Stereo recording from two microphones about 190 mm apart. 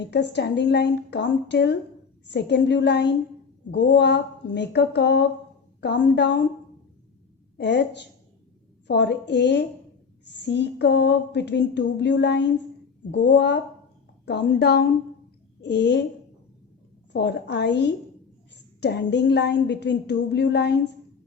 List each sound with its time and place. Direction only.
0.0 s a woman's voice: 65° left (ahead or behind)
7.6 s a woman's voice: 65° left (ahead or behind)
17.1 s a woman's voice: 65° left (ahead or behind)